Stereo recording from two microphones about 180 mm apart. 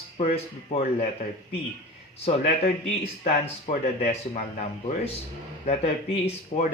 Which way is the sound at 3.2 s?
35° left (ahead or behind).